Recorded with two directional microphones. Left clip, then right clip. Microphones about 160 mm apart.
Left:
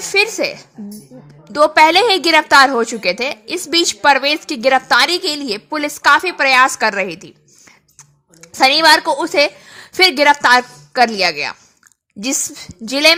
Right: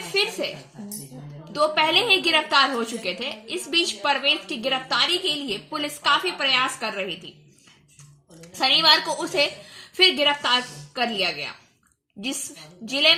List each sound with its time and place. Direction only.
0.1 s a woman's voice: 65° left (ahead or behind)
1.5 s a woman's voice: 65° left (ahead or behind)
8.5 s a woman's voice: 65° left (ahead or behind)
12.8 s a woman's voice: 65° left (ahead or behind)